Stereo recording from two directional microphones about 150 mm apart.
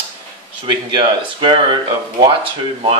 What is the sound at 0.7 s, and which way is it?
Speech, 30° right (ahead or behind).